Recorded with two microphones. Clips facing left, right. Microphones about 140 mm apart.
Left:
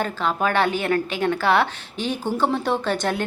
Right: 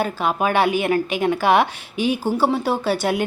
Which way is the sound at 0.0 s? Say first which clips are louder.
Right 2 dB; 15° right (ahead or behind).